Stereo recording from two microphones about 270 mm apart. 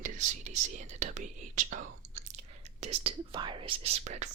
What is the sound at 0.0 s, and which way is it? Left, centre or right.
Speech, right.